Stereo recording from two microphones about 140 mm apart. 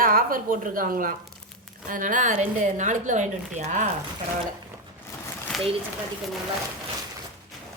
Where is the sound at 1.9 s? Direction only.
70° right (ahead or behind).